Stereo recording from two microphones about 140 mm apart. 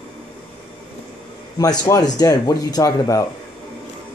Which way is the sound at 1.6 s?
25° left (ahead or behind).